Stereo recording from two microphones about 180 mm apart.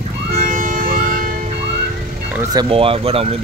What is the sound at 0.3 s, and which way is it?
Music, 50° right (ahead or behind).